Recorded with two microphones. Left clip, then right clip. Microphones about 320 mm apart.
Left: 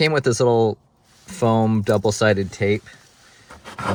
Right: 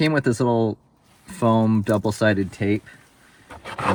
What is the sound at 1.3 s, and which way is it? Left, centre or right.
Speech, left.